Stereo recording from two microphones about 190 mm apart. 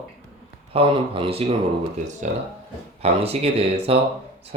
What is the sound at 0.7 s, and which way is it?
Speech, 30° right (ahead or behind).